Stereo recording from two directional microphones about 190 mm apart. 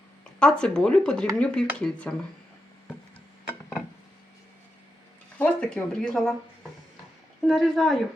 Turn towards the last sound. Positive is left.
turn(degrees=0)  # may be behind; listen again after turning